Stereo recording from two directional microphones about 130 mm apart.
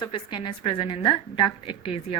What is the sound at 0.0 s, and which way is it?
A woman's voice, 35° left (ahead or behind).